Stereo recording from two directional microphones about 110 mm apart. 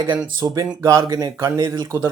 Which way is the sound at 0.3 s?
35° right (ahead or behind).